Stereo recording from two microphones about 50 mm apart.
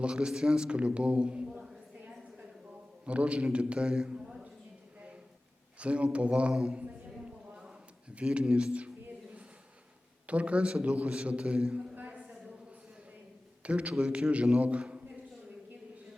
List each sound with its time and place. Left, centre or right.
0.0 s a man's voice: centre
5.8 s a man's voice: right
8.1 s a man's voice: right
10.2 s a man's voice: right
11.9 s a sound: right
13.6 s a man's voice: right